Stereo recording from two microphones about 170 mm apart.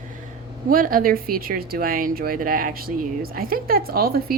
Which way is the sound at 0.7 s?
55° right (ahead or behind).